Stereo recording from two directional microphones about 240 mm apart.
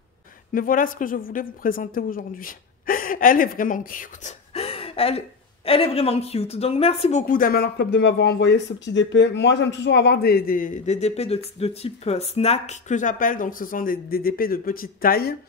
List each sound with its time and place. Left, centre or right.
0.5 s a woman's voice: left